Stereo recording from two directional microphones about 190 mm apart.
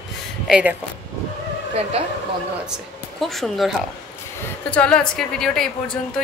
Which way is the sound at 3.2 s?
Centre (ahead or behind).